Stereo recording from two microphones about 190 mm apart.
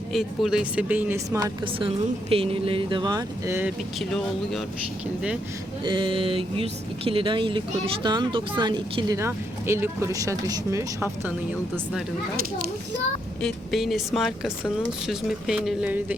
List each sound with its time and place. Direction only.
0.1 s speech: centre (ahead or behind)
3.9 s speech: centre (ahead or behind)
5.8 s speech: 25° right (ahead or behind)
13.4 s speech: centre (ahead or behind)